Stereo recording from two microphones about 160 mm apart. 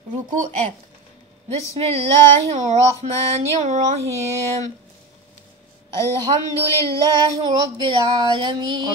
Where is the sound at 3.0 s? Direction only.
40° right (ahead or behind).